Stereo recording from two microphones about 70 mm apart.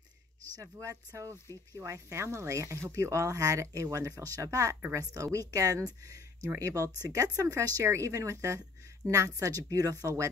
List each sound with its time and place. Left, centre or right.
0.6 s a woman's voice: right